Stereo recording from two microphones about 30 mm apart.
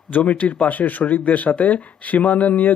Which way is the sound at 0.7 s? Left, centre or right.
Left.